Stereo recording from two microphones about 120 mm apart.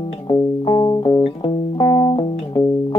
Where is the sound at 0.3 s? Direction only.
35° left (ahead or behind).